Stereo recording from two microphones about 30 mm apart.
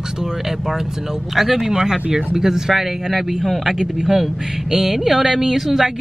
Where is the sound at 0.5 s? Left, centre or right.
Centre.